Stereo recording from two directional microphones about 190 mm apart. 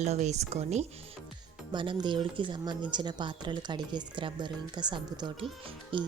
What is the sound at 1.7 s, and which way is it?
Speech, 25° right (ahead or behind).